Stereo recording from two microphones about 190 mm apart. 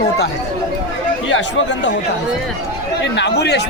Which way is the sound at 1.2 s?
75° left (ahead or behind).